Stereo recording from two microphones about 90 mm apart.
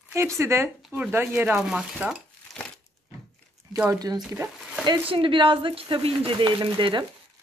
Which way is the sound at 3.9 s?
45° right (ahead or behind).